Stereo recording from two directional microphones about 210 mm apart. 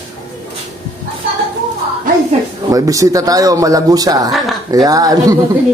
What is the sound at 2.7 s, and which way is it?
Speech, 15° right (ahead or behind).